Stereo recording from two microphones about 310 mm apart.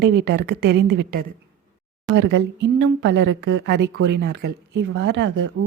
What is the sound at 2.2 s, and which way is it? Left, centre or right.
Speech, right.